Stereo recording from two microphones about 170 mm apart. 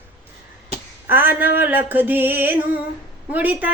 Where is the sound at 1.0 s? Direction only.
10° right (ahead or behind).